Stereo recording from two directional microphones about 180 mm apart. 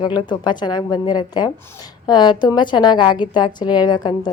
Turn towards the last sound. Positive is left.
turn(degrees=25)  # may be behind; listen again after turning